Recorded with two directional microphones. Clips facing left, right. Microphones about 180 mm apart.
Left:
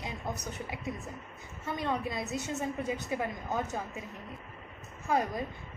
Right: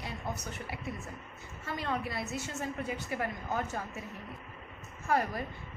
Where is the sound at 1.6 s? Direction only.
20° left (ahead or behind).